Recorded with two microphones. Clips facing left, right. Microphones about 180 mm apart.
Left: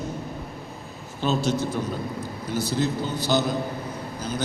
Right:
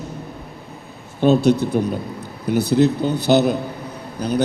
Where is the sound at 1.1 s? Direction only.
55° right (ahead or behind).